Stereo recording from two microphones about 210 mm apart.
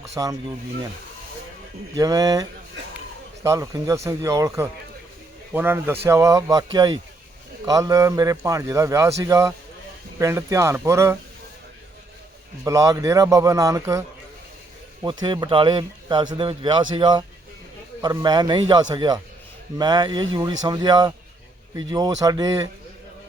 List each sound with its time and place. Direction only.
0.1 s speech: 15° right (ahead or behind)
2.0 s a man's voice: 15° right (ahead or behind)
12.6 s a man's voice: 15° right (ahead or behind)
15.0 s a man's voice: 20° right (ahead or behind)